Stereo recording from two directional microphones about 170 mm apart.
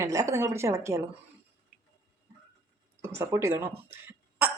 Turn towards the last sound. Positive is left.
turn(degrees=-15)  # may be behind; listen again after turning